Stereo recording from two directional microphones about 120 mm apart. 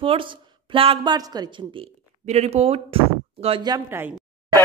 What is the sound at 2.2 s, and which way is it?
Speech, 65° right (ahead or behind).